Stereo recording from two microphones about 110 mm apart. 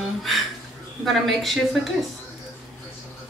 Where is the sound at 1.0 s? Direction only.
Centre (ahead or behind).